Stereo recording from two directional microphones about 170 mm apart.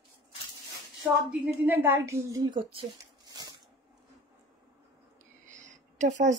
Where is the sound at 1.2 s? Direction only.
10° right (ahead or behind); by 2.8 s 30° right (ahead or behind).